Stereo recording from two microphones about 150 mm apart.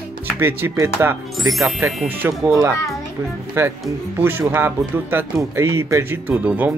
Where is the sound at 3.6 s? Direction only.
15° right (ahead or behind).